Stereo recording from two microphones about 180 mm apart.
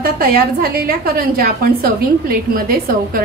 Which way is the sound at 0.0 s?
55° right (ahead or behind).